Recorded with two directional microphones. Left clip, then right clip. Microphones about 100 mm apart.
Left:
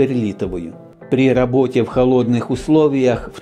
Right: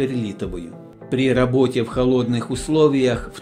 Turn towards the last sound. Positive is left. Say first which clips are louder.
# left 3 dB
turn(degrees=40)  # may be behind; listen again after turning